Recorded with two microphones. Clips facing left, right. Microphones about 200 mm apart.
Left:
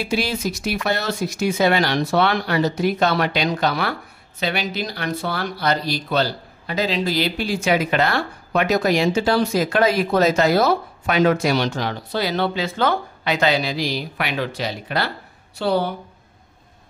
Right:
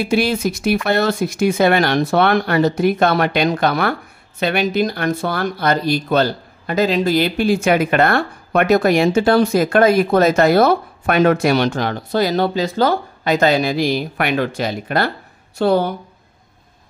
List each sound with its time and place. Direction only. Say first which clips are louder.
0.0 s speech: right 6 dB; 55° right (ahead or behind)